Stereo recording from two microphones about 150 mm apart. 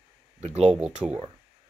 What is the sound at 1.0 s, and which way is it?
Speech, 5° right (ahead or behind).